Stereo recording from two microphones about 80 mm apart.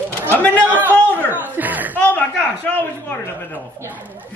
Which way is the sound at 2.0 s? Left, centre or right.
Centre.